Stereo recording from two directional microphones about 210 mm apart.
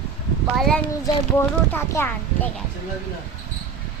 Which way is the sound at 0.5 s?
Centre (ahead or behind).